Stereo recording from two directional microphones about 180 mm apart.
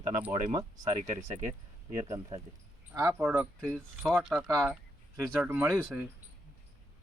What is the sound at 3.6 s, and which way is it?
Speech, 5° left (ahead or behind).